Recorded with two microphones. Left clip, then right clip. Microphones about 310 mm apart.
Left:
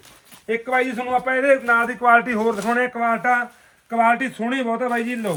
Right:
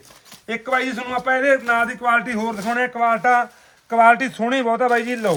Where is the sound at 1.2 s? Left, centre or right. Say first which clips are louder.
Right 2 dB; centre.